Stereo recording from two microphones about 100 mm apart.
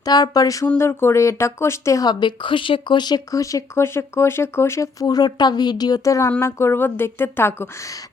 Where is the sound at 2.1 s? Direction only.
50° left (ahead or behind); by 8.0 s 30° left (ahead or behind).